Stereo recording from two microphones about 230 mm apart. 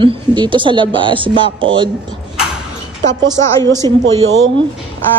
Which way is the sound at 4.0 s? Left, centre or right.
Right.